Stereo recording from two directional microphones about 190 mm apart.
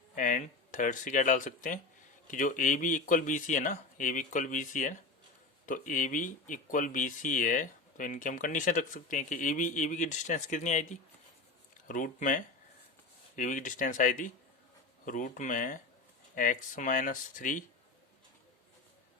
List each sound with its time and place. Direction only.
0.2 s speech: 40° left (ahead or behind)
11.9 s speech: 45° left (ahead or behind)